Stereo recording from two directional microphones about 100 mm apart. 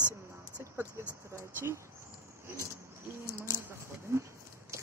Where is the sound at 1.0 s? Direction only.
25° right (ahead or behind).